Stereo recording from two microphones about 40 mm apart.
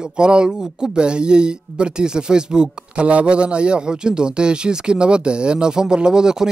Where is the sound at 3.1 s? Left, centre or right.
Right.